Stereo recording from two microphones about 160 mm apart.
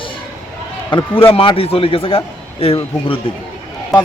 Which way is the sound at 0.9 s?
30° left (ahead or behind).